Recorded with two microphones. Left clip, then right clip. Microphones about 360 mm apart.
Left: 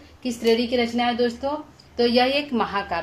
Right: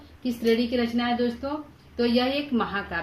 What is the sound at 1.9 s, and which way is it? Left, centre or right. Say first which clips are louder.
Speech: left 5 dB; centre.